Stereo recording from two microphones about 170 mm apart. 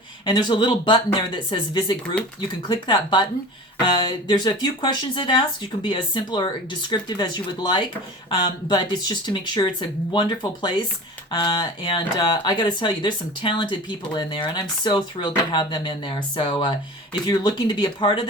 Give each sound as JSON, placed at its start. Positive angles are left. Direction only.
{"t": 0.3, "sound": "speech", "side_deg": 25}